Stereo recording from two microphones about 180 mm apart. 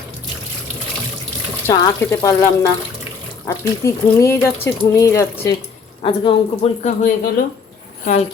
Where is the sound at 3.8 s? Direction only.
15° left (ahead or behind).